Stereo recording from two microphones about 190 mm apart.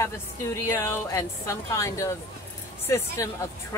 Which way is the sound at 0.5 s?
15° left (ahead or behind).